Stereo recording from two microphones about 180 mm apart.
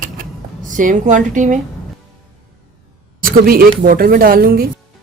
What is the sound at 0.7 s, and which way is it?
Speech, 45° right (ahead or behind).